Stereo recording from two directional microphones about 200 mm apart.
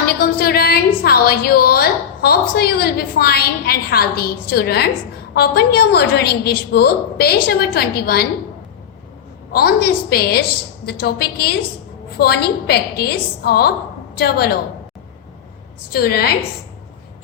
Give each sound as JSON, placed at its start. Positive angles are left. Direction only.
{"t": 0.0, "sound": "a woman's voice", "side_deg": 50}
{"t": 9.5, "sound": "a woman's voice", "side_deg": 50}
{"t": 15.9, "sound": "a woman's voice", "side_deg": 50}